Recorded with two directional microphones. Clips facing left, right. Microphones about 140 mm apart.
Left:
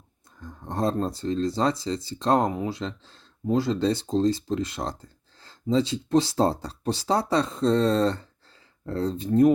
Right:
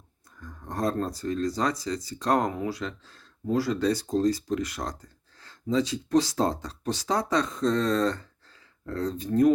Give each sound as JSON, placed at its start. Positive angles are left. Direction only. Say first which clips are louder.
{"t": 0.3, "sound": "speech", "louder": "left 3 dB", "side_deg": 25}